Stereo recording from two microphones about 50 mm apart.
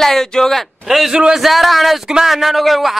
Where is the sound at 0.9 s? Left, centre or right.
Centre.